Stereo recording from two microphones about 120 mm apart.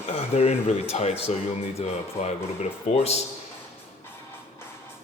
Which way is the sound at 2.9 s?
75° left (ahead or behind).